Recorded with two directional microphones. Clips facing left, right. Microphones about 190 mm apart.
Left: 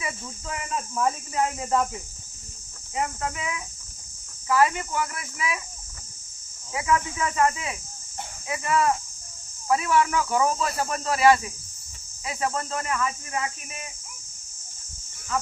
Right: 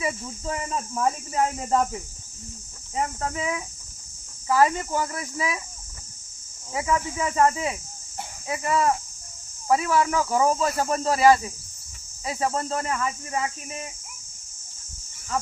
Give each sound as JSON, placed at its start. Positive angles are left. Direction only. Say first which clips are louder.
{"t": 0.0, "sound": "speech", "louder": "right 6 dB", "side_deg": -35}
{"t": 2.9, "sound": "speech", "louder": "right 1 dB", "side_deg": -35}
{"t": 6.7, "sound": "speech", "louder": "even", "side_deg": -30}